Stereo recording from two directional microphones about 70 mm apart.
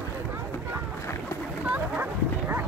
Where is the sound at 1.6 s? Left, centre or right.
Right.